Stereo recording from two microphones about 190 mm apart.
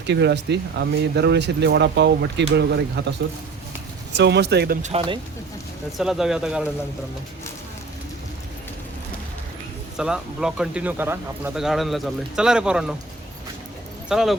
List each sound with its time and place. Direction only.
0.0 s speech: 65° right (ahead or behind)
4.1 s speech: 65° right (ahead or behind)
4.8 s speech: 30° right (ahead or behind)
6.0 s speech: centre (ahead or behind)
10.0 s speech: 5° right (ahead or behind)
14.1 s speech: centre (ahead or behind)